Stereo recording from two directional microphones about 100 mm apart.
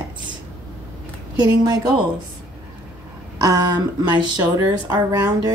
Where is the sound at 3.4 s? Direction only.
35° right (ahead or behind).